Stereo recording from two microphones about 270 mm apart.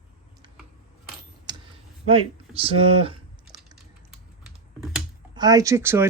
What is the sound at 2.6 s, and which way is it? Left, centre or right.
Speech, right.